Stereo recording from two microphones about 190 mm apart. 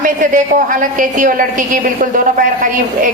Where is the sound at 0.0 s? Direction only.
45° right (ahead or behind).